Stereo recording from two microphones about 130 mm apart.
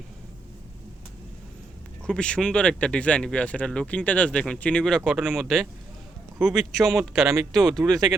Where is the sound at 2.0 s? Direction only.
5° left (ahead or behind).